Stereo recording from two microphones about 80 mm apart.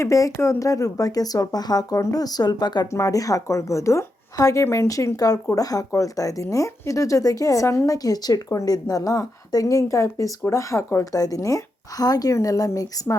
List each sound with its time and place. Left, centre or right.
0.0 s a woman's voice: left
2.0 s speech: left
2.2 s speech: left
2.9 s a woman's voice: left